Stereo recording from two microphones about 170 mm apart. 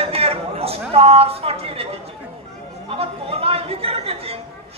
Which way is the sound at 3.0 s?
35° right (ahead or behind).